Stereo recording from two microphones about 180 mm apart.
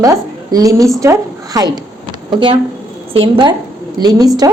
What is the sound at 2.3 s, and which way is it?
A woman's voice, 30° right (ahead or behind).